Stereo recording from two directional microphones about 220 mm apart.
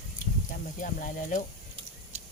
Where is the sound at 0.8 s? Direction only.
35° left (ahead or behind).